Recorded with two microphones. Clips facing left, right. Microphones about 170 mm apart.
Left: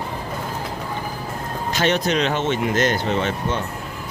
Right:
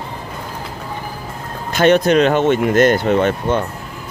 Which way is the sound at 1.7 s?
55° right (ahead or behind).